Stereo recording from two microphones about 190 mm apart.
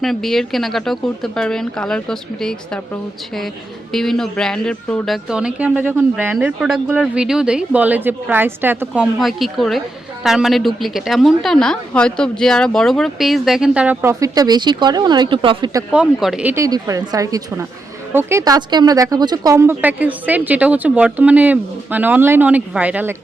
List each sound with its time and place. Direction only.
0.0 s speech: centre (ahead or behind)
3.9 s speech: centre (ahead or behind); by 15.8 s 25° right (ahead or behind)
15.9 s speech: 5° right (ahead or behind)